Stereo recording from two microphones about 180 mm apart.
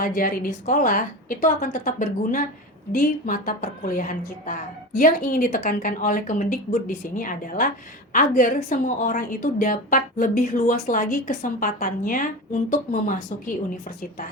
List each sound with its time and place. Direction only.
0.0 s a woman's voice: 50° left (ahead or behind)